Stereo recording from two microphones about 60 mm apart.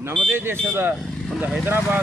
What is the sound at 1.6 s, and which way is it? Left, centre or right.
Speech, right.